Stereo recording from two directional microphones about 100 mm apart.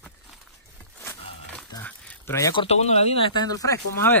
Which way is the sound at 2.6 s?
90° left.